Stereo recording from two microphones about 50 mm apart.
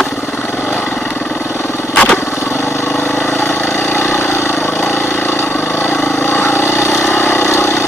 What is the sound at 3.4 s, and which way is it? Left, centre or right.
Vehicle, left.